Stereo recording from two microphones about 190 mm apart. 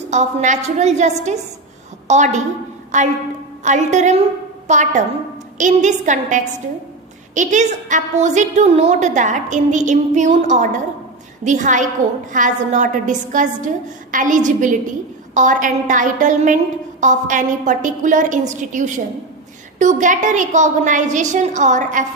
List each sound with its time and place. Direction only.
0.1 s a woman's voice: 35° right (ahead or behind)